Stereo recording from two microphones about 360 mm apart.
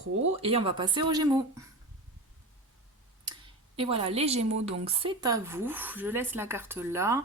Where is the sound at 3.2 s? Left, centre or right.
Centre.